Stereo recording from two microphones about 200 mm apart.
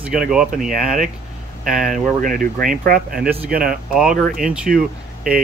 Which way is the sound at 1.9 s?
45° right (ahead or behind).